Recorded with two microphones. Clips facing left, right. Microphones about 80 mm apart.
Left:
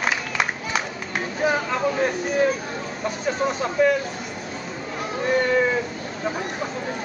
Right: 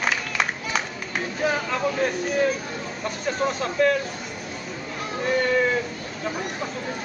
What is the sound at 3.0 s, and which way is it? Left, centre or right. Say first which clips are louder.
Speech: left 1 dB; centre.